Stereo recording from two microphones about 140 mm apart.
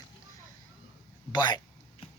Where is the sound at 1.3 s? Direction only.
30° left (ahead or behind).